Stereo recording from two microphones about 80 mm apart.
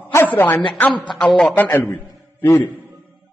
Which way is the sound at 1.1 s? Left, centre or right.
Centre.